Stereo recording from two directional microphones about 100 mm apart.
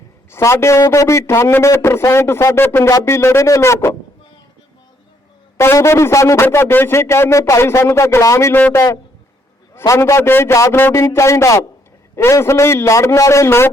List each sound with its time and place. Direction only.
0.3 s a man's voice: 25° left (ahead or behind)
5.5 s a man's voice: 25° left (ahead or behind)
8.5 s a man's voice: 20° left (ahead or behind)
9.8 s a man's voice: 30° left (ahead or behind)